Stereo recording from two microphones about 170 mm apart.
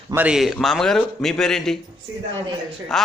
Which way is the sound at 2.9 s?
Centre (ahead or behind).